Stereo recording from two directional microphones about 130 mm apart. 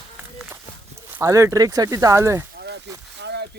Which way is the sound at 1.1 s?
25° right (ahead or behind).